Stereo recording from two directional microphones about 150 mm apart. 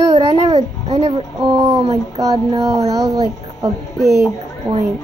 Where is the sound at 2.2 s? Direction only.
25° right (ahead or behind).